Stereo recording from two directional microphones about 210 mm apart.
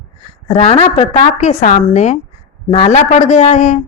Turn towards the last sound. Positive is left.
turn(degrees=35)  # may be behind; listen again after turning